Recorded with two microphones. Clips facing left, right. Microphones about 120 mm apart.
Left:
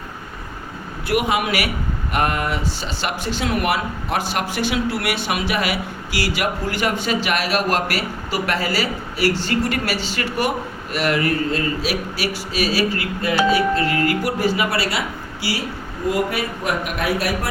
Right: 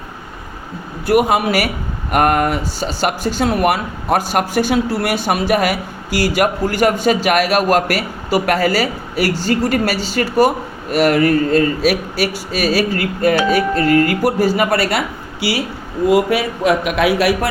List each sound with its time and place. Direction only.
1.0 s speech: 45° right (ahead or behind)
2.1 s speech: 50° right (ahead or behind); by 15.6 s 70° right (ahead or behind)
16.0 s a man's voice: 90° right